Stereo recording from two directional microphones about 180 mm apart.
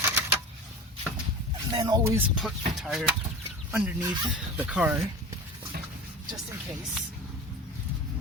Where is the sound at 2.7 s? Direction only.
Centre (ahead or behind).